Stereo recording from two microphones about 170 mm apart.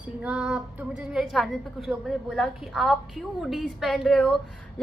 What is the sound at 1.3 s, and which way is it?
A woman's voice, centre (ahead or behind).